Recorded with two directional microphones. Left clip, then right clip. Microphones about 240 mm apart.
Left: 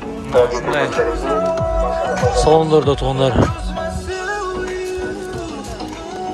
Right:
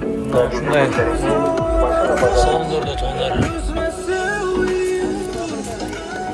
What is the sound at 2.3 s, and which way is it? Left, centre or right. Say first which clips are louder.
Speech: left 4 dB; left.